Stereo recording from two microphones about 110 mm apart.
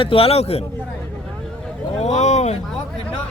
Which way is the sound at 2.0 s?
85° left.